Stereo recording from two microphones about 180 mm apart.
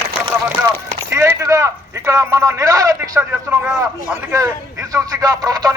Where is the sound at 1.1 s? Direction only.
15° right (ahead or behind).